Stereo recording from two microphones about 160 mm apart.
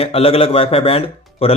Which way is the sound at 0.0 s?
35° left (ahead or behind).